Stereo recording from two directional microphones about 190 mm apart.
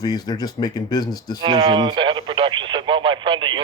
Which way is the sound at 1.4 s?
30° right (ahead or behind).